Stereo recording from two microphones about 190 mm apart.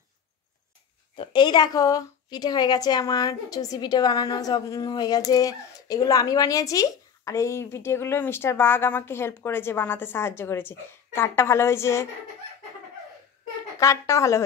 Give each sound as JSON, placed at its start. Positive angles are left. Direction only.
{"t": 1.1, "sound": "a woman's voice", "side_deg": 25}
{"t": 13.7, "sound": "a woman's voice", "side_deg": 15}